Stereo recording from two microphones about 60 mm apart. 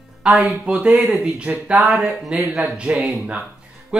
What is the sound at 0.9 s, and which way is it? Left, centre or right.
Speech, centre.